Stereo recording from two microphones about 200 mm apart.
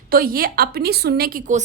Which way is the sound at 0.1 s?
45° right (ahead or behind).